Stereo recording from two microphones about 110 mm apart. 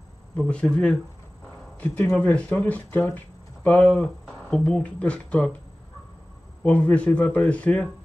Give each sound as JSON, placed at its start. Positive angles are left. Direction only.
{"t": 0.4, "sound": "speech", "side_deg": 10}
{"t": 6.6, "sound": "speech", "side_deg": 10}